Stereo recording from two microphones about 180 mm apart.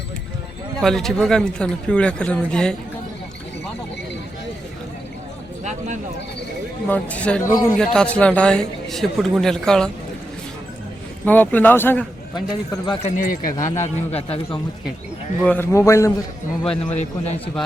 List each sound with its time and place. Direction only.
0.8 s a man's voice: centre (ahead or behind)
6.8 s a man's voice: 10° left (ahead or behind)
11.3 s speech: 10° left (ahead or behind)
12.7 s speech: 20° left (ahead or behind)
13.0 s a man's voice: 35° left (ahead or behind)
13.2 s speech: 50° left (ahead or behind)
13.8 s a man's voice: 35° left (ahead or behind)
15.4 s speech: 10° left (ahead or behind)
16.9 s a man's voice: 35° left (ahead or behind)